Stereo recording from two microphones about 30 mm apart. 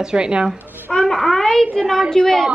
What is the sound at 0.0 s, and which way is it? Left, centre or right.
Speech, right.